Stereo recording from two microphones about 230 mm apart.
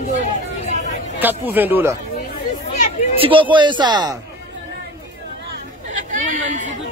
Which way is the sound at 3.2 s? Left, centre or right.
Right.